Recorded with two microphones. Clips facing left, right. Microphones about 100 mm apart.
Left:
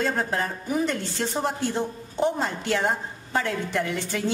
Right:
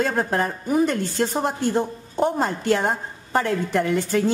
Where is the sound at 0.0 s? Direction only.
50° right (ahead or behind).